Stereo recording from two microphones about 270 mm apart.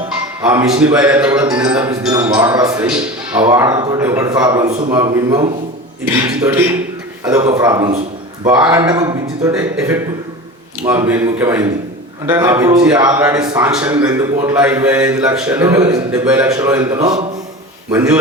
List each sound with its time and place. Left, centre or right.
0.4 s speech: centre
4.7 s a man's voice: right
4.9 s speech: centre
13.7 s a man's voice: centre